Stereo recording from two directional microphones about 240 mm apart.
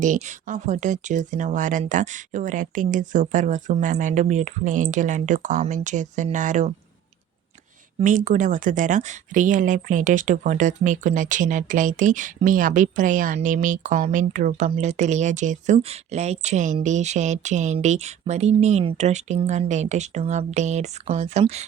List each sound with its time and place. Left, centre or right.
0.0 s speech: right
7.9 s speech: right